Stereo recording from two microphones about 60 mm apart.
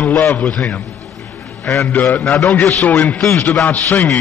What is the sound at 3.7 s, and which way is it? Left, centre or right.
Speech, left.